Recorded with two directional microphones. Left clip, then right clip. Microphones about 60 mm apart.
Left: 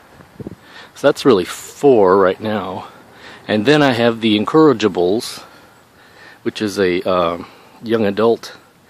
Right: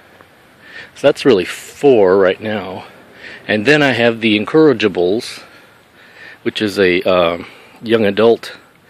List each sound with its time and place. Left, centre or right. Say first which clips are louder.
0.7 s speech: right 2 dB; left
2.6 s speech: left 1 dB; left
3.2 s speech: right 2 dB; left
6.2 s speech: right 3 dB; centre